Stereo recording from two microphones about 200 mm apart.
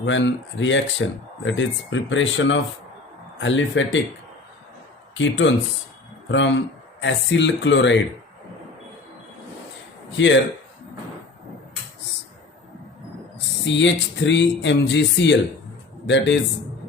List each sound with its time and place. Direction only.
0.0 s speech: 65° left (ahead or behind)
5.1 s speech: 70° left (ahead or behind)
10.2 s speech: 65° left (ahead or behind)
13.7 s speech: 65° left (ahead or behind)